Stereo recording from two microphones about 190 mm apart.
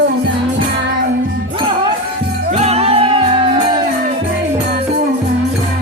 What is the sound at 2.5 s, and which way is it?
Music, 35° right (ahead or behind).